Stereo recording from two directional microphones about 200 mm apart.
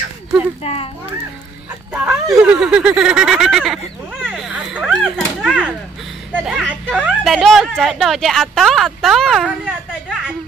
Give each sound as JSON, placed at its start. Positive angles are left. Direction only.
{"t": 0.6, "sound": "a child's voice", "side_deg": 30}
{"t": 1.9, "sound": "speech", "side_deg": -5}
{"t": 4.1, "sound": "a sound", "side_deg": 0}
{"t": 6.3, "sound": "speech", "side_deg": 0}